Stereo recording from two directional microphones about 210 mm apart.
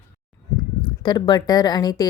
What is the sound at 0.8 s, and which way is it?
A woman's voice, 20° left (ahead or behind).